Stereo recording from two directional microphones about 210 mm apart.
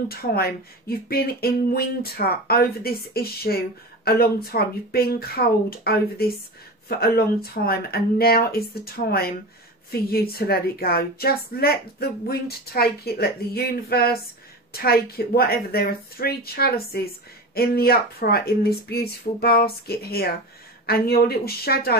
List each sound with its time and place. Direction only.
0.1 s speech: 45° left (ahead or behind)